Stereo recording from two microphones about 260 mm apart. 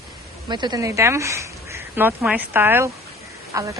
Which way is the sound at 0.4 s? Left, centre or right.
Centre.